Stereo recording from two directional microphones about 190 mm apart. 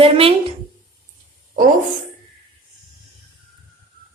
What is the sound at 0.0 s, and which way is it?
Speech, 30° right (ahead or behind).